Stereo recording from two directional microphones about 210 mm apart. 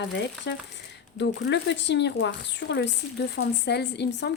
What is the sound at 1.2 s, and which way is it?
A woman's voice, 55° left (ahead or behind).